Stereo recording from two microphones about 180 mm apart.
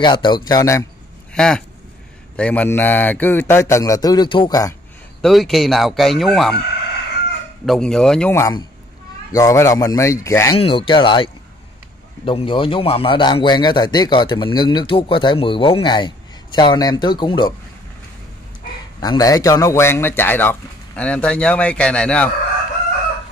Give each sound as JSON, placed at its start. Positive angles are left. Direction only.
{"t": 0.0, "sound": "speech", "side_deg": 25}
{"t": 1.3, "sound": "a sound", "side_deg": 5}
{"t": 2.3, "sound": "a man's voice", "side_deg": 5}
{"t": 5.2, "sound": "speech", "side_deg": 0}
{"t": 7.6, "sound": "a man's voice", "side_deg": 0}
{"t": 10.5, "sound": "speech", "side_deg": 30}
{"t": 12.3, "sound": "speech", "side_deg": 30}
{"t": 18.9, "sound": "a man's voice", "side_deg": 20}